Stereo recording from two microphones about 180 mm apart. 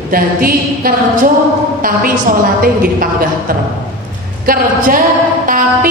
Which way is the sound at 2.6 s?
55° right (ahead or behind).